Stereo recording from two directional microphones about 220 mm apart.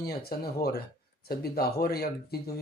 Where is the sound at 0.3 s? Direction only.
45° left (ahead or behind).